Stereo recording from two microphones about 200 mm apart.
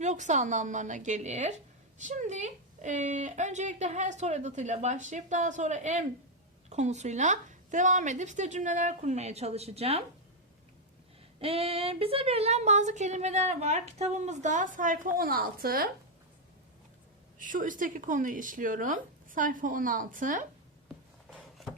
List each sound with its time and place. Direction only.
0.0 s speech: 35° right (ahead or behind)
11.3 s speech: 30° right (ahead or behind); by 15.9 s 50° right (ahead or behind)
17.3 s speech: 40° right (ahead or behind)